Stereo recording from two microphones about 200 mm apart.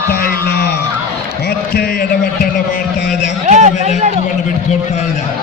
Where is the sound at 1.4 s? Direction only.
50° left (ahead or behind).